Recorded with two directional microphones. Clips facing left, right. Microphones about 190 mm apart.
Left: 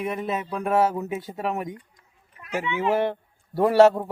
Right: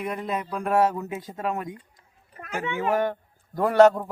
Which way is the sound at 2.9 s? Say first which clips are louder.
Left 1 dB; 25° left (ahead or behind).